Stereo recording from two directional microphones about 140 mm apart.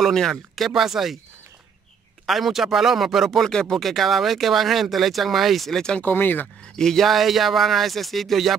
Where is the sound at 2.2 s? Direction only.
Centre (ahead or behind).